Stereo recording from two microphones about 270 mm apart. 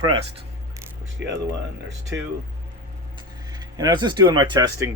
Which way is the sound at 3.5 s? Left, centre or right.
Centre.